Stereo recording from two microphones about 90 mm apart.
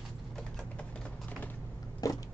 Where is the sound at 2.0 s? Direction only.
40° left (ahead or behind).